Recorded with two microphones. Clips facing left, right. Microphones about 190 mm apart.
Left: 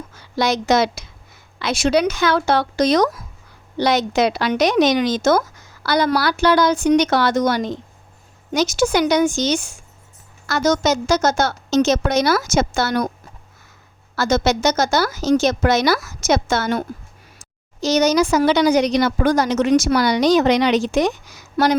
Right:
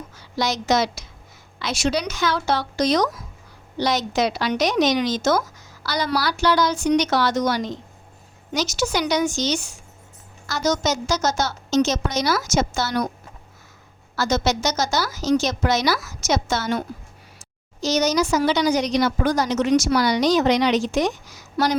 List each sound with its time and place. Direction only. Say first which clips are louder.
0.2 s a woman's voice: left 5 dB; 55° left (ahead or behind)
14.2 s a woman's voice: left 4 dB; 55° left (ahead or behind)
17.8 s a woman's voice: left 4 dB; 60° left (ahead or behind)